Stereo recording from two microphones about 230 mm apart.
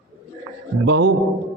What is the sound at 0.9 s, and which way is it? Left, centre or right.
Speech, right.